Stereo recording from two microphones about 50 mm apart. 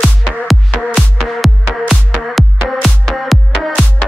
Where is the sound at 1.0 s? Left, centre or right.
Centre.